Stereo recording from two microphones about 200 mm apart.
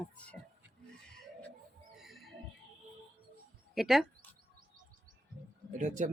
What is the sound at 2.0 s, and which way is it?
Music, centre (ahead or behind).